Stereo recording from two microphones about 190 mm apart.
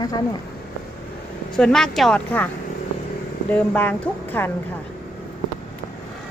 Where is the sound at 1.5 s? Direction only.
5° left (ahead or behind).